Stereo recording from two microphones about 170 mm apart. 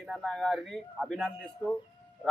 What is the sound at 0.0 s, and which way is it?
Speech, centre (ahead or behind).